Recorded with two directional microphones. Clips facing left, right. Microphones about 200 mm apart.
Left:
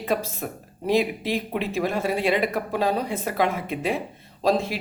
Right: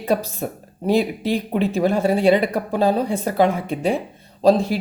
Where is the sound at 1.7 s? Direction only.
30° right (ahead or behind).